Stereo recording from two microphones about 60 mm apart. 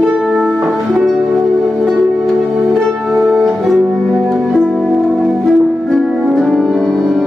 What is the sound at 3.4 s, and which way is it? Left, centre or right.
Music, centre.